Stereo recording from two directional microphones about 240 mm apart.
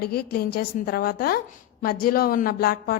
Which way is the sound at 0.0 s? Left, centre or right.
Left.